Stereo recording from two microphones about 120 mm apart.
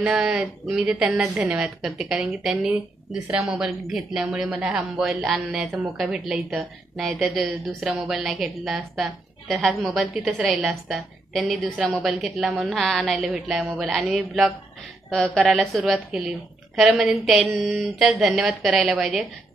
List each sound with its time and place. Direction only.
0.0 s a woman's voice: 5° right (ahead or behind)